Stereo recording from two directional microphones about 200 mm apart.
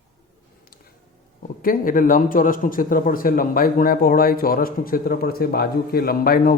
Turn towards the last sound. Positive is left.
turn(degrees=50)  # may be behind; listen again after turning